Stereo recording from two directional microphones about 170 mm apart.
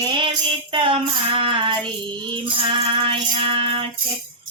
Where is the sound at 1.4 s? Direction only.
30° right (ahead or behind).